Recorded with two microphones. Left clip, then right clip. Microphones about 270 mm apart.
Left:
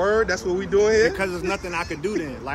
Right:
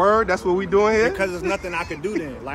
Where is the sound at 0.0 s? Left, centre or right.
Right.